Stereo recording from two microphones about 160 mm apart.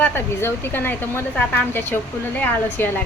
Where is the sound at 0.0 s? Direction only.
15° left (ahead or behind).